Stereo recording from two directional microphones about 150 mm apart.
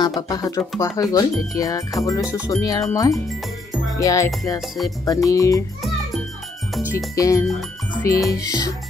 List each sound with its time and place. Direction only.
0.0 s speech: 25° left (ahead or behind)
4.6 s music: centre (ahead or behind)
5.0 s speech: 25° left (ahead or behind)
7.2 s speech: 20° left (ahead or behind)